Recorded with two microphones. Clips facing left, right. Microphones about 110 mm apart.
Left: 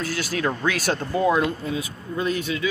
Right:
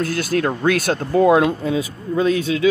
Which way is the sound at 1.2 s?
85° right.